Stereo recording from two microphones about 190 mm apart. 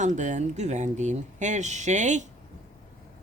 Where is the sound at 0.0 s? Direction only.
40° right (ahead or behind).